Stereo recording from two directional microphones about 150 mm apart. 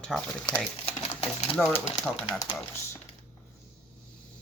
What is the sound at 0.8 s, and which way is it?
Typewriter, 45° left (ahead or behind).